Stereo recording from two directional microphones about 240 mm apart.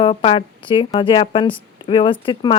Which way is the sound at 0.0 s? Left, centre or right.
Left.